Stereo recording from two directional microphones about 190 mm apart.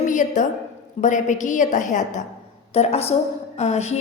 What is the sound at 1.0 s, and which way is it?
A woman's voice, 40° left (ahead or behind).